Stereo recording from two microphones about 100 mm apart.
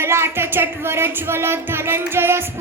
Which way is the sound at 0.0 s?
25° right (ahead or behind).